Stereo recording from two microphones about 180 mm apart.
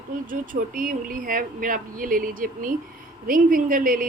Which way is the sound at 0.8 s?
50° right (ahead or behind).